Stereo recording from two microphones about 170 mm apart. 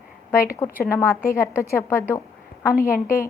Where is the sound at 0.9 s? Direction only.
15° left (ahead or behind).